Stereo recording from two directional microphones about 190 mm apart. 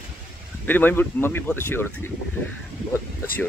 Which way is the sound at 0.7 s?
10° left (ahead or behind).